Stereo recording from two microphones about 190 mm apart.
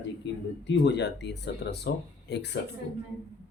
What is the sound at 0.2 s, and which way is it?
Speech, 65° left (ahead or behind).